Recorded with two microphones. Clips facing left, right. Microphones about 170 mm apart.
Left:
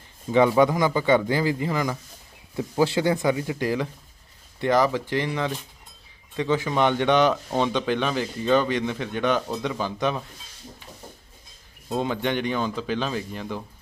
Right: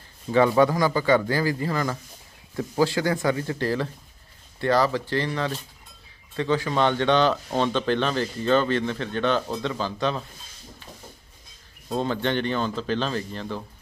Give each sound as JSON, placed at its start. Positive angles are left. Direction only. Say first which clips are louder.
{"t": 0.6, "sound": "speech", "louder": "even", "side_deg": 20}
{"t": 11.9, "sound": "speech", "louder": "even", "side_deg": 10}